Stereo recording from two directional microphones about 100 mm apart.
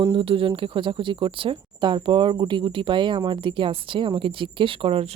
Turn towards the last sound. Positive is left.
turn(degrees=-65)  # may be behind; listen again after turning